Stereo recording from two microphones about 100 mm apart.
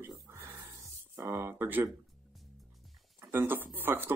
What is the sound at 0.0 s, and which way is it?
Music, 25° right (ahead or behind).